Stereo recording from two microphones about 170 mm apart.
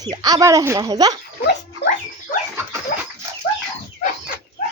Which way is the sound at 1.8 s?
75° left (ahead or behind).